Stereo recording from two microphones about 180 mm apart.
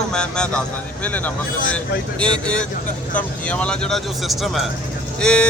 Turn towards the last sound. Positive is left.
turn(degrees=5)  # may be behind; listen again after turning